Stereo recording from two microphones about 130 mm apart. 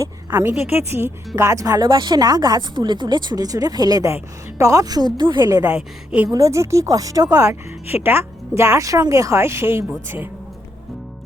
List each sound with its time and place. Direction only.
0.0 s a sound: 20° right (ahead or behind)
0.7 s a woman's voice: 20° right (ahead or behind); by 5.5 s 35° right (ahead or behind)
5.5 s speech: 25° right (ahead or behind)
5.7 s a woman's voice: 5° right (ahead or behind)
6.3 s speech: 25° right (ahead or behind)